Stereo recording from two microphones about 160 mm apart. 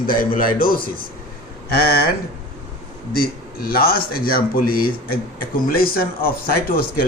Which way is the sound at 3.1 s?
65° left (ahead or behind).